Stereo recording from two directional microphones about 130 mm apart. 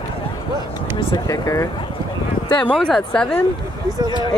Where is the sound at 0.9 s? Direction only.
30° left (ahead or behind).